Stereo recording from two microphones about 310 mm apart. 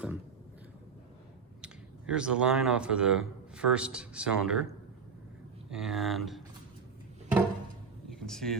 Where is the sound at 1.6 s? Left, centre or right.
Centre.